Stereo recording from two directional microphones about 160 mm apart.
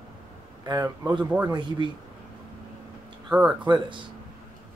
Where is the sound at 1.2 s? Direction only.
10° right (ahead or behind).